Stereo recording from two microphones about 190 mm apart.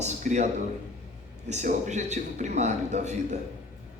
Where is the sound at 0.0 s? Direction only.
40° right (ahead or behind).